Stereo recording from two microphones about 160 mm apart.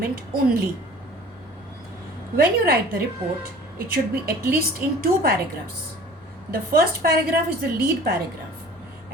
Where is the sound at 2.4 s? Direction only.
70° right (ahead or behind).